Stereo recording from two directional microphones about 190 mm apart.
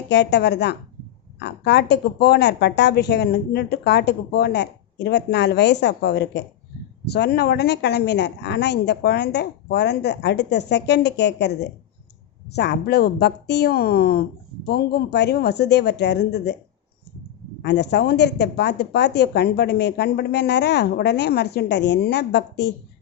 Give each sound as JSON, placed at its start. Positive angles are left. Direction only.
{"t": 0.1, "sound": "a woman's voice", "side_deg": 65}
{"t": 12.5, "sound": "a woman's voice", "side_deg": 60}
{"t": 17.6, "sound": "a woman's voice", "side_deg": 65}